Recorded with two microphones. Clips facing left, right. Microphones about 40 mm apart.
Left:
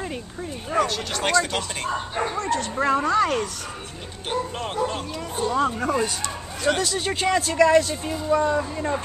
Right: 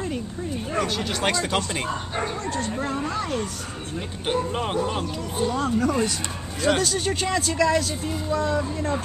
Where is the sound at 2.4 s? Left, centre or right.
Left.